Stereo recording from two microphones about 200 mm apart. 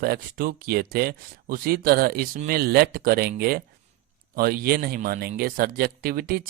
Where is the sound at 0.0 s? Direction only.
50° right (ahead or behind).